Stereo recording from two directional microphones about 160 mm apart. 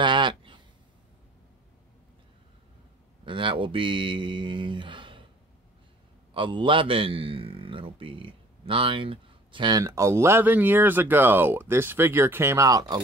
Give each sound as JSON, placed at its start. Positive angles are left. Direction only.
{"t": 0.0, "sound": "a sound", "side_deg": -30}
{"t": 3.3, "sound": "speech", "side_deg": -30}
{"t": 6.3, "sound": "a man's voice", "side_deg": -30}